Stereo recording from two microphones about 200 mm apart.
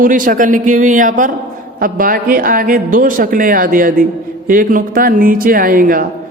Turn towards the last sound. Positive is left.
turn(degrees=-45)  # may be behind; listen again after turning